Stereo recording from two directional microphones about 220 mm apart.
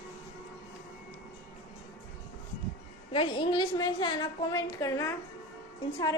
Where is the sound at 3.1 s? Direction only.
25° left (ahead or behind).